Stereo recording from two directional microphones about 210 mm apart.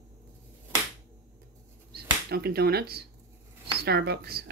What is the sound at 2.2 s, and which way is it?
Speech, 50° right (ahead or behind).